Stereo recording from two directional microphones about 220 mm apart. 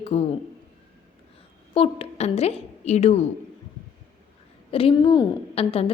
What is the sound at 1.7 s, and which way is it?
A woman's voice, 25° left (ahead or behind).